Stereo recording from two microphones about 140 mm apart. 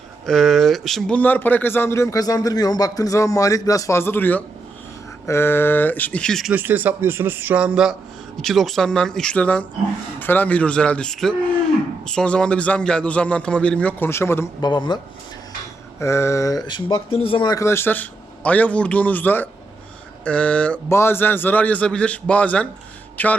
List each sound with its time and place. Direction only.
0.3 s speech: centre (ahead or behind)
6.5 s speech: 10° right (ahead or behind); by 14.4 s 20° left (ahead or behind)
14.6 s speech: 30° left (ahead or behind)
16.0 s speech: 20° left (ahead or behind)